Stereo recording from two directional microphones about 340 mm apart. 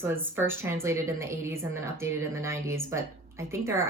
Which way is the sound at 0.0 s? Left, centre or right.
Centre.